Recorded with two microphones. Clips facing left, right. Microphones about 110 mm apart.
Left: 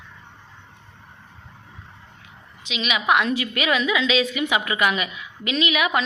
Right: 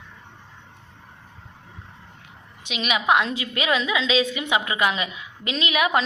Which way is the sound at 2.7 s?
40° right (ahead or behind).